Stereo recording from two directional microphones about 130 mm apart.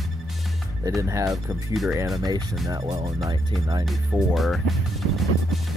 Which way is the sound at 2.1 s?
30° right (ahead or behind).